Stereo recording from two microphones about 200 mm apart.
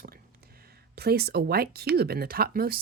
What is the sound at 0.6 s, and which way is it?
Speech, 50° right (ahead or behind).